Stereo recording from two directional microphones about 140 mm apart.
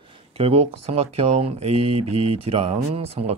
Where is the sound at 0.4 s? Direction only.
45° right (ahead or behind).